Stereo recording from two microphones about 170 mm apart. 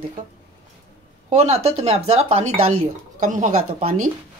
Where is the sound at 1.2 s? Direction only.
40° right (ahead or behind).